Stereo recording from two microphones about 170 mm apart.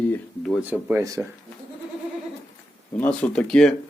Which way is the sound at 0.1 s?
5° left (ahead or behind).